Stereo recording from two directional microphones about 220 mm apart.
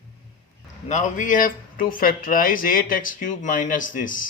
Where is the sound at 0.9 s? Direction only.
35° left (ahead or behind).